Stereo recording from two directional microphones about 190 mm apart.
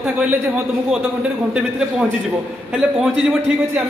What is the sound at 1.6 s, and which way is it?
A man's voice, 5° right (ahead or behind).